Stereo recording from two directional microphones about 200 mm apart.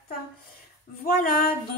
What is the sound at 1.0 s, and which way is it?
Speech, 45° left (ahead or behind).